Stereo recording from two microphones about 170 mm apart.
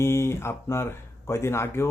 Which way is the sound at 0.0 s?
15° left (ahead or behind).